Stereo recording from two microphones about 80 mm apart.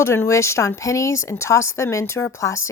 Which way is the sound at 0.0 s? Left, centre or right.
Left.